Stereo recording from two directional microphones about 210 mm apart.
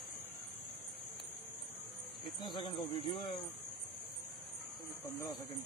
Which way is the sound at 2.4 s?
25° left (ahead or behind).